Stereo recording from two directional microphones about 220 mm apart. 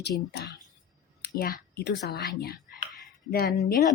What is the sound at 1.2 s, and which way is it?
A woman's voice, 45° left (ahead or behind).